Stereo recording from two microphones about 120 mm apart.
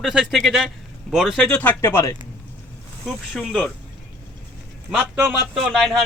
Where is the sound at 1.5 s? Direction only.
15° left (ahead or behind).